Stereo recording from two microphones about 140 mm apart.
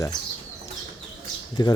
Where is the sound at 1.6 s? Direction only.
30° left (ahead or behind).